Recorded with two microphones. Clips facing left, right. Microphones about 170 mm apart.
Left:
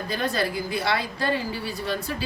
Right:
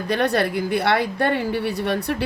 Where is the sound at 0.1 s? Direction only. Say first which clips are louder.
Right 7 dB; 70° right (ahead or behind).